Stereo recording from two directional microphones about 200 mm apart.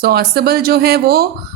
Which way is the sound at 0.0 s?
50° right (ahead or behind).